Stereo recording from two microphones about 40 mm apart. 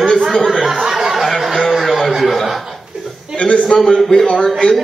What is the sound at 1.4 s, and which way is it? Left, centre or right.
Chuckle, centre.